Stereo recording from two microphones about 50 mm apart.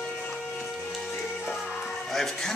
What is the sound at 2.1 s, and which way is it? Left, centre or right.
Speech, centre.